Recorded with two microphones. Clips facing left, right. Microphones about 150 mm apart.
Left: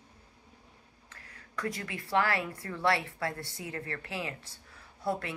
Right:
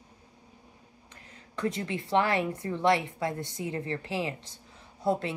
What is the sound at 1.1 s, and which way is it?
Speech, 20° right (ahead or behind).